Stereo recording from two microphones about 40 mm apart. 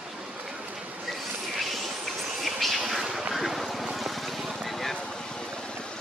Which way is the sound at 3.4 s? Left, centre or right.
Centre.